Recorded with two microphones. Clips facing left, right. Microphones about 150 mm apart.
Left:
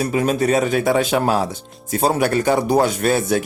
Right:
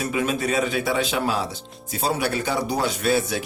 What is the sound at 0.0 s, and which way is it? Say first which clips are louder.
Speech: left 6 dB; 40° left (ahead or behind).